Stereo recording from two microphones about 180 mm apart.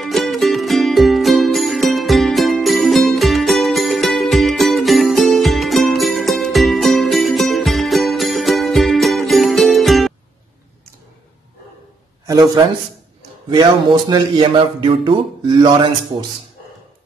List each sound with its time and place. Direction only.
0.0 s music: centre (ahead or behind)
12.3 s speech: 20° right (ahead or behind)